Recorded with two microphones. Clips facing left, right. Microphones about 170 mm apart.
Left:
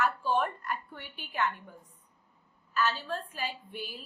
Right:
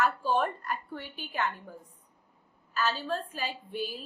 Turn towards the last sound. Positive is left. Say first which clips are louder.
# right 4 dB
turn(degrees=-35)  # may be behind; listen again after turning